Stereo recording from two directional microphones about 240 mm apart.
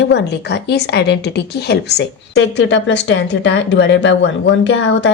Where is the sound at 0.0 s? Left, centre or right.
Left.